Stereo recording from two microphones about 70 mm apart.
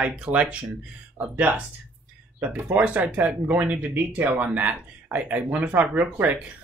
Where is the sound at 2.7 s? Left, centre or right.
Right.